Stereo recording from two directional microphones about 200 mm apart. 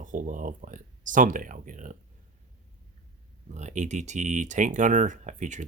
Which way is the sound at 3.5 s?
35° right (ahead or behind).